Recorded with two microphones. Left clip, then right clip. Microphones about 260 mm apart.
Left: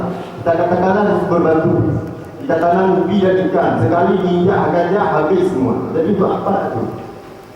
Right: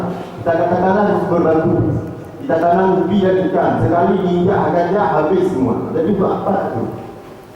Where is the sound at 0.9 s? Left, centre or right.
Centre.